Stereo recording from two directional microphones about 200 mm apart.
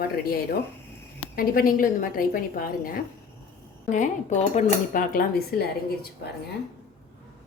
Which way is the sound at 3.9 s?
35° left (ahead or behind).